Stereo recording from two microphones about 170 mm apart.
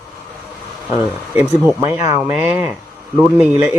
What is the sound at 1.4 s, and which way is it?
Speech, 10° right (ahead or behind).